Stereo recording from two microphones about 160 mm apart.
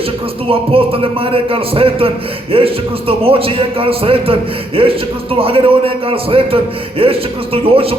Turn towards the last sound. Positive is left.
turn(degrees=-35)  # may be behind; listen again after turning